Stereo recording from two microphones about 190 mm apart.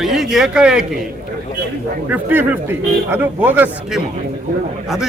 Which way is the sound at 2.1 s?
10° right (ahead or behind).